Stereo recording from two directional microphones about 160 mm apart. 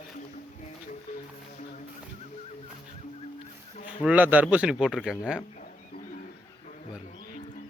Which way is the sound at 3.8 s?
10° right (ahead or behind).